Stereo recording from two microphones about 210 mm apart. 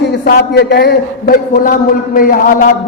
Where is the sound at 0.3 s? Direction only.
50° left (ahead or behind).